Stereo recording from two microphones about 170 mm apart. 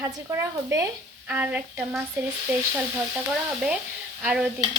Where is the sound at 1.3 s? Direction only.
10° right (ahead or behind).